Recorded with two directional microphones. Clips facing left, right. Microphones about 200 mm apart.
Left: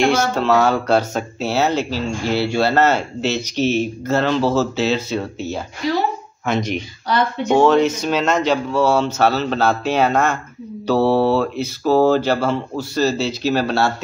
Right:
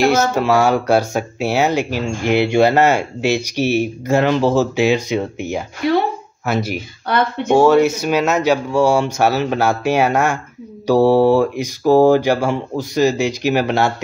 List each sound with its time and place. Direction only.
0.0 s speech: 10° right (ahead or behind)
5.8 s speech: 60° right (ahead or behind)
6.4 s speech: 5° right (ahead or behind)
7.1 s speech: 55° right (ahead or behind)
7.4 s speech: 10° right (ahead or behind)